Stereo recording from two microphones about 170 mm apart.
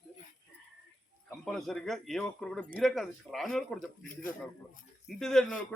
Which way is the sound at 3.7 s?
55° left (ahead or behind).